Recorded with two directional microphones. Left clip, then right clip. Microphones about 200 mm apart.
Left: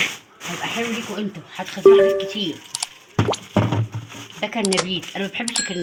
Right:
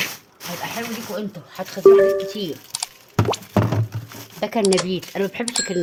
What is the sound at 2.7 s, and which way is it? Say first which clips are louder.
Plop: right 1 dB; centre (ahead or behind).